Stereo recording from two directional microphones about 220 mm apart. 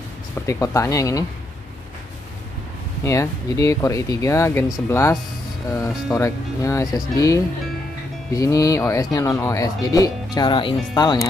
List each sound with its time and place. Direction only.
0.5 s speech: 15° left (ahead or behind)
3.0 s speech: 15° left (ahead or behind)
6.1 s speech: 15° left (ahead or behind)